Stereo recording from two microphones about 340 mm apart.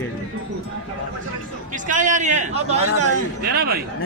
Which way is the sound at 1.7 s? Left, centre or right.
Right.